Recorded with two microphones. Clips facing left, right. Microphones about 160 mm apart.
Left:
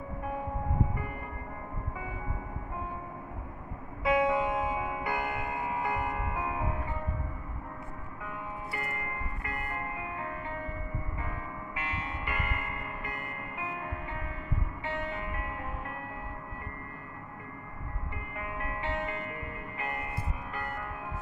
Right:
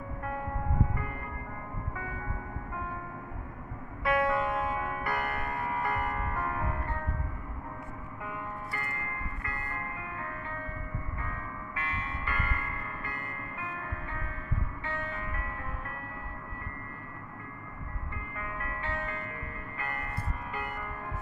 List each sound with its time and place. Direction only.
4.0 s music: 20° left (ahead or behind)
8.7 s music: 20° left (ahead or behind)
18.4 s music: 20° left (ahead or behind)
19.8 s church bell: 15° left (ahead or behind)
20.5 s music: centre (ahead or behind)